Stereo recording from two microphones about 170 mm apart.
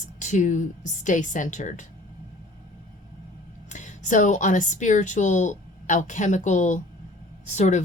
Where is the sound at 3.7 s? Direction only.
45° left (ahead or behind).